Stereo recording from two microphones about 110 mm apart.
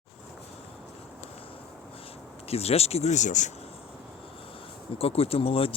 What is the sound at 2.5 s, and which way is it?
Speech, 70° left (ahead or behind).